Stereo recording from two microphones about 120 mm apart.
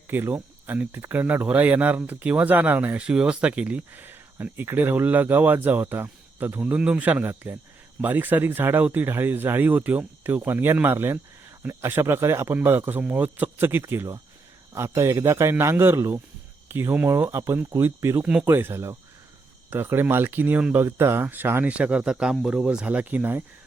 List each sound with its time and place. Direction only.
0.1 s speech: 15° right (ahead or behind)